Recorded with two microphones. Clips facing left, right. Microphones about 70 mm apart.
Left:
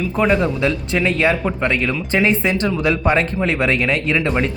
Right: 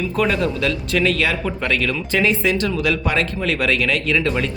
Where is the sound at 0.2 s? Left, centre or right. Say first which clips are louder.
Left 3 dB; left.